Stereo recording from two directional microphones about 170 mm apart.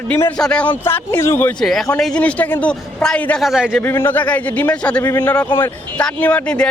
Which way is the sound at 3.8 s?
15° left (ahead or behind).